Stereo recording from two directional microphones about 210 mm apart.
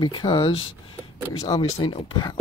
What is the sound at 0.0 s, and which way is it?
Speech, 20° left (ahead or behind).